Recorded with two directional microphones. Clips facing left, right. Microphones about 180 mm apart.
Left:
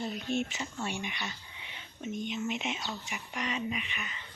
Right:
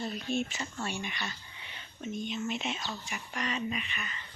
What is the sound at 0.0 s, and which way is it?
Speech, 15° left (ahead or behind).